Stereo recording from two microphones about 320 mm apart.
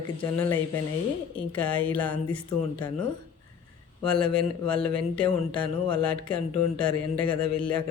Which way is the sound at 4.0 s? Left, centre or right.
Centre.